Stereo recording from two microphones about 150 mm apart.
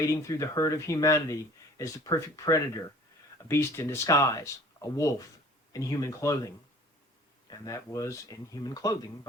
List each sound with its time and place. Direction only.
0.0 s speech: 20° left (ahead or behind)
7.5 s speech: 25° left (ahead or behind)